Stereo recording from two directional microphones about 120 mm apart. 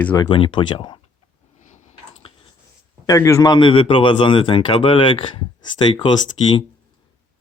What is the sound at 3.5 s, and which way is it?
Speech, 45° left (ahead or behind).